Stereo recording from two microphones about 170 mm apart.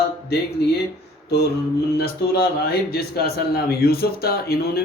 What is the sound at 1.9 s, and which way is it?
A man's voice, 65° left (ahead or behind).